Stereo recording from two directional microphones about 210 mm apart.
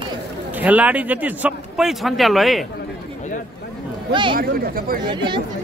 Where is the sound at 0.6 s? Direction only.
5° right (ahead or behind).